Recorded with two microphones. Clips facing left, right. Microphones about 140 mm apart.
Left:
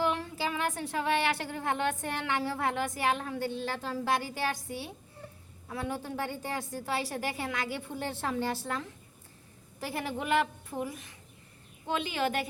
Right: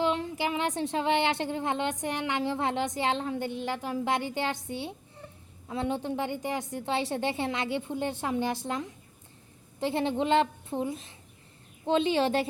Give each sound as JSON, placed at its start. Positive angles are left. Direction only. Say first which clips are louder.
{"t": 0.0, "sound": "a woman's voice", "louder": "right 3 dB", "side_deg": -20}